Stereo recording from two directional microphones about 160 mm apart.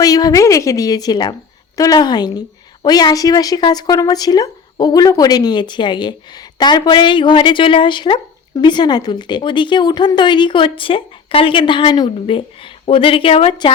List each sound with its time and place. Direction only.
0.0 s a woman's voice: 25° left (ahead or behind)